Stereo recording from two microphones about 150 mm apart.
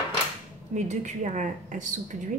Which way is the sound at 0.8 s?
55° right (ahead or behind).